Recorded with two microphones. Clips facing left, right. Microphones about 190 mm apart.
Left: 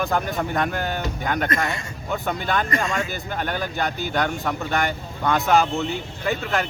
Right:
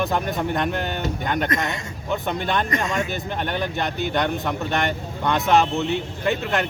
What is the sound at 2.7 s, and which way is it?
Speech, 20° right (ahead or behind).